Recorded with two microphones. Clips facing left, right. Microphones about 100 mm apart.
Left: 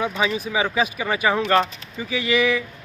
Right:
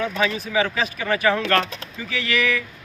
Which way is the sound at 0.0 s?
15° left (ahead or behind).